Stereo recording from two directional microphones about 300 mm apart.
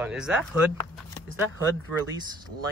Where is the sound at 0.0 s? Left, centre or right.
Centre.